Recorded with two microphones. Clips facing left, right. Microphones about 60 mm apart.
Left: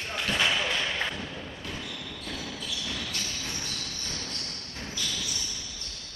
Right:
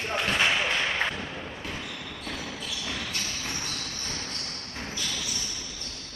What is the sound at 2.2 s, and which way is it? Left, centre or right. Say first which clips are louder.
Basketball bounce: right 1 dB; right.